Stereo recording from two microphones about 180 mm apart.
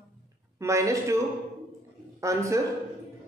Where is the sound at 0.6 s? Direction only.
15° right (ahead or behind).